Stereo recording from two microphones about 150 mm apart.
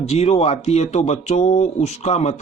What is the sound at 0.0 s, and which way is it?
Speech, 45° left (ahead or behind).